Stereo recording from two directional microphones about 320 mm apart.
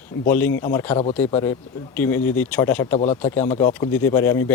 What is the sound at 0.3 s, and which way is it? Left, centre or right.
Speech, centre.